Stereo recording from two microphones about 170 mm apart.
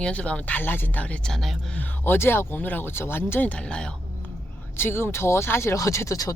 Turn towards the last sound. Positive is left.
turn(degrees=20)  # may be behind; listen again after turning